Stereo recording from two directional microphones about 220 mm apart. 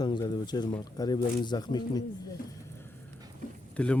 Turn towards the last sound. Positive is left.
turn(degrees=5)  # may be behind; listen again after turning